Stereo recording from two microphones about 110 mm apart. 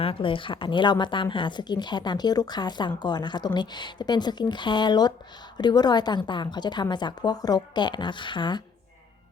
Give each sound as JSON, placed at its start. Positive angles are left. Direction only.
{"t": 0.0, "sound": "a woman's voice", "side_deg": 55}